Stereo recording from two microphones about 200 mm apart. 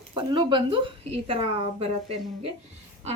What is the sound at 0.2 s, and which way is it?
A woman's voice, 25° right (ahead or behind).